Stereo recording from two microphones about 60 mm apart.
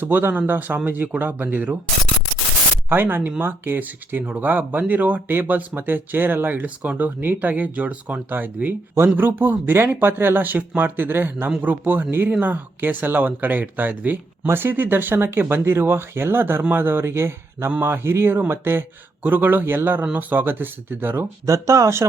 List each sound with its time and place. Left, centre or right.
0.0 s speech: right
2.9 s speech: right
21.4 s speech: right